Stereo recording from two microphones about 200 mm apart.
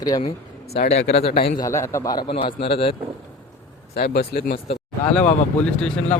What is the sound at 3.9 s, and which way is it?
Speech, 50° left (ahead or behind).